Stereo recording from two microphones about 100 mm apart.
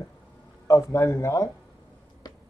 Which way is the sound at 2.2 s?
40° left (ahead or behind).